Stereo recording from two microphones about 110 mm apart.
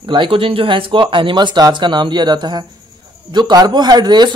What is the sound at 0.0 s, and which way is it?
A man's voice, 50° right (ahead or behind).